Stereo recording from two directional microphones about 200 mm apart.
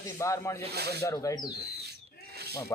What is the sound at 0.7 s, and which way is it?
Speech, 55° right (ahead or behind).